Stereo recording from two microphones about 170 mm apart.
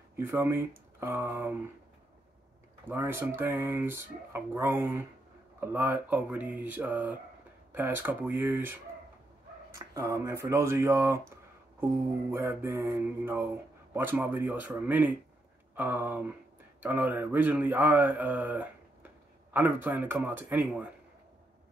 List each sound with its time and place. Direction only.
0.1 s speech: 15° right (ahead or behind)
2.9 s speech: 15° right (ahead or behind)
9.8 s speech: 20° right (ahead or behind)